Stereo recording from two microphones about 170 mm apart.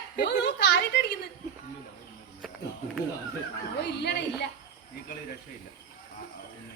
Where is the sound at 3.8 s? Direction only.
75° left (ahead or behind).